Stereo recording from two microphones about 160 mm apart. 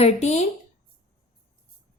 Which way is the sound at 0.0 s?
45° left (ahead or behind).